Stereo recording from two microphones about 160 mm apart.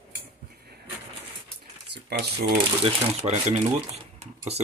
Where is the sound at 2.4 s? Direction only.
35° right (ahead or behind).